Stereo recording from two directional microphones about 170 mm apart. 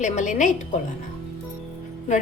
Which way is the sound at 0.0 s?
45° left (ahead or behind).